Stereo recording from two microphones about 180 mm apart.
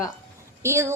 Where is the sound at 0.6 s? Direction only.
15° right (ahead or behind).